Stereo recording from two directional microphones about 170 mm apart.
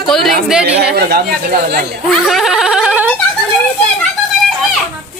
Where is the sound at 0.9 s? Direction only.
65° right (ahead or behind).